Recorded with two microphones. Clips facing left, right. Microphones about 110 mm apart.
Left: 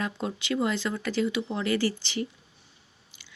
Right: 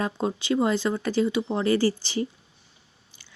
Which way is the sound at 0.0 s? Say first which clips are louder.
Right 5 dB; 30° right (ahead or behind).